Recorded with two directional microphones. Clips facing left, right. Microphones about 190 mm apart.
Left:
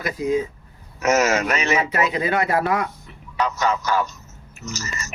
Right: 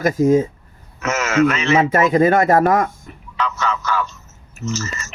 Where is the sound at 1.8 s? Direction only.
45° right (ahead or behind).